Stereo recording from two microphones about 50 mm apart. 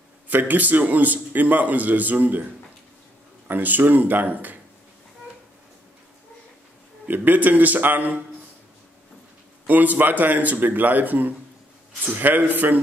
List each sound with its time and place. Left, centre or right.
0.3 s a man's voice: right
3.4 s a man's voice: right
7.1 s a man's voice: right
9.7 s a man's voice: right